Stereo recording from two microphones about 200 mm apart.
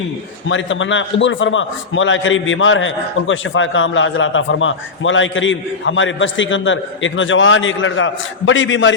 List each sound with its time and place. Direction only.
0.4 s a man's voice: 70° left (ahead or behind)